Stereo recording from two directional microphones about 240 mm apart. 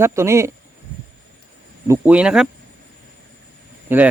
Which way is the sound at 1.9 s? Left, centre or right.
Centre.